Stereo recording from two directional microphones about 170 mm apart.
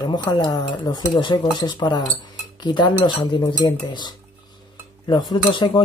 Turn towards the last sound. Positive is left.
turn(degrees=30)  # may be behind; listen again after turning